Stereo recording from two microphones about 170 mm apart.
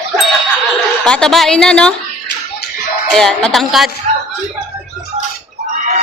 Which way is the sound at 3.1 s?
5° left (ahead or behind).